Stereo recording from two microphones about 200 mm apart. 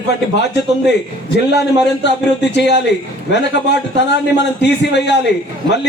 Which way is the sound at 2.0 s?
60° left (ahead or behind).